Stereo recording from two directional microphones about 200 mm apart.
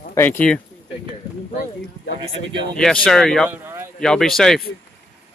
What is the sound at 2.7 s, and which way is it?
Speech, 5° left (ahead or behind).